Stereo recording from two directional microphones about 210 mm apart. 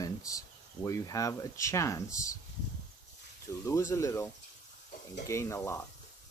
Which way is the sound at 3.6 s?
15° left (ahead or behind).